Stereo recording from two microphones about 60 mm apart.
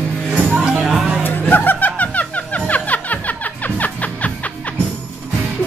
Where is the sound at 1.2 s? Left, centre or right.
Left.